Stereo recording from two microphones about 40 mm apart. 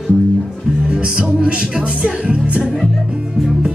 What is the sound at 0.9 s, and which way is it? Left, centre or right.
Music, right.